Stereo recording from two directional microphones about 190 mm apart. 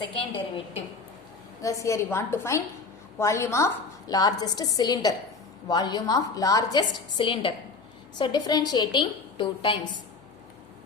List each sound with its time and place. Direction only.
0.0 s a woman's voice: 25° left (ahead or behind)
1.6 s a woman's voice: 15° left (ahead or behind)